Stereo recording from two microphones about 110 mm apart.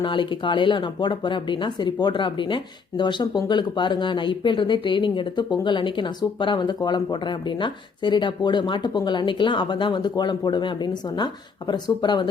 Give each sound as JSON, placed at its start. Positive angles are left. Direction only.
{"t": 0.0, "sound": "speech", "side_deg": 45}